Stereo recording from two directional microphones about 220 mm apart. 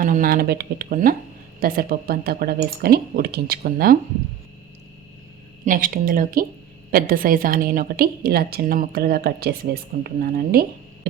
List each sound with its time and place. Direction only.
0.0 s a woman's voice: 40° right (ahead or behind)
5.6 s a woman's voice: 40° right (ahead or behind)